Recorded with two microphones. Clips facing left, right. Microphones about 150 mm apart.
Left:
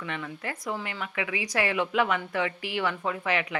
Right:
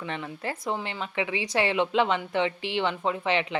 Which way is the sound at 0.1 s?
30° right (ahead or behind).